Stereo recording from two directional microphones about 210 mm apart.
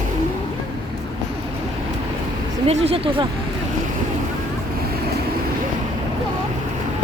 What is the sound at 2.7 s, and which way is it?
Speech, 30° right (ahead or behind).